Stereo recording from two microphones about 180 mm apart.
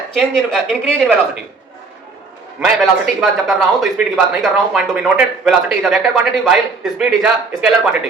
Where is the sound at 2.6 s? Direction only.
Centre (ahead or behind).